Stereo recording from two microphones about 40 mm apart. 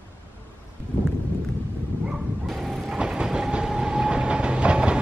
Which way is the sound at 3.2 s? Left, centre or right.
Centre.